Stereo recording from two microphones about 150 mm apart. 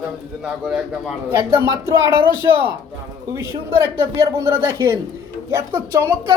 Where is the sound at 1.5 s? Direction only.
15° right (ahead or behind).